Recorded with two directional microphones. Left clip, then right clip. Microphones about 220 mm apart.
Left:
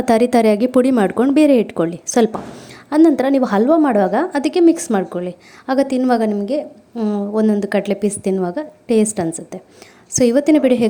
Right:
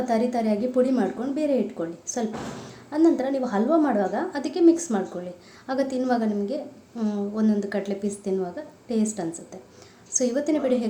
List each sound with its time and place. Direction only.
0.0 s a woman's voice: 45° left (ahead or behind)